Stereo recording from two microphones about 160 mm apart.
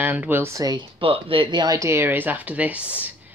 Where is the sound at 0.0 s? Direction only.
10° right (ahead or behind).